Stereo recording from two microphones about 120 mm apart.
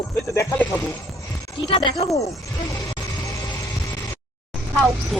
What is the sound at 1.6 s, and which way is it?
Speech, 45° left (ahead or behind).